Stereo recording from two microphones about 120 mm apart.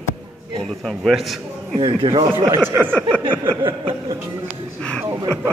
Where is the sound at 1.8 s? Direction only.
45° right (ahead or behind).